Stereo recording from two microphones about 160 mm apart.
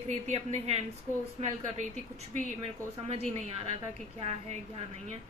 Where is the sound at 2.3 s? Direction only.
45° right (ahead or behind).